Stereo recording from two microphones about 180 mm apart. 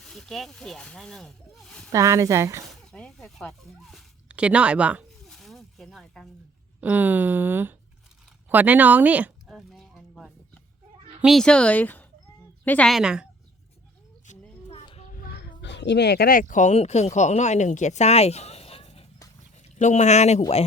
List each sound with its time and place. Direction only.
0.0 s speech: centre (ahead or behind)
1.9 s speech: 15° right (ahead or behind)
2.6 s speech: 5° left (ahead or behind)
6.8 s speech: 10° right (ahead or behind)
8.4 s a sound: 10° right (ahead or behind)
11.2 s speech: centre (ahead or behind)
14.7 s speech: 35° left (ahead or behind)